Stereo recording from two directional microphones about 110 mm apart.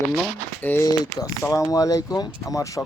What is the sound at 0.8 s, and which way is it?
Speech, 35° left (ahead or behind).